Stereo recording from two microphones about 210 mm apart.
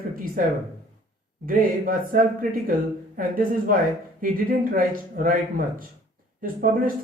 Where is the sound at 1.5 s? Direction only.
40° right (ahead or behind).